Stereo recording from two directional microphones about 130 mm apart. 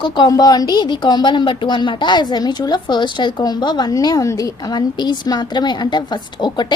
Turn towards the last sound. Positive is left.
turn(degrees=35)  # may be behind; listen again after turning